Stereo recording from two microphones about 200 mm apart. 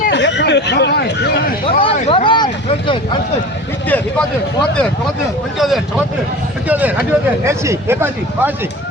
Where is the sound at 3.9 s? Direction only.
10° left (ahead or behind).